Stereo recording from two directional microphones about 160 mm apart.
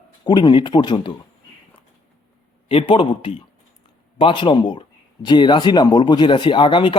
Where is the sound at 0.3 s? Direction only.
30° left (ahead or behind).